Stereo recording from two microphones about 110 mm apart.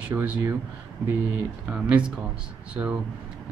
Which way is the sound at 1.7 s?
10° right (ahead or behind).